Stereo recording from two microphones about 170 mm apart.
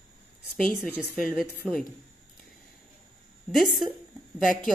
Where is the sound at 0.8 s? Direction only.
5° right (ahead or behind).